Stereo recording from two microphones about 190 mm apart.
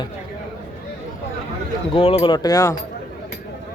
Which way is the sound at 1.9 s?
30° left (ahead or behind).